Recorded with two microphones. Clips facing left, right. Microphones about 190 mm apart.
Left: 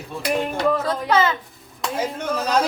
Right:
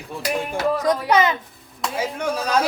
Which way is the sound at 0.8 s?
15° right (ahead or behind).